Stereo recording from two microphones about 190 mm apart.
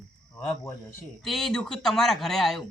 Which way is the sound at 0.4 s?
15° left (ahead or behind).